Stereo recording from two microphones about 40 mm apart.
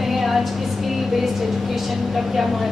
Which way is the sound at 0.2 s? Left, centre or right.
Centre.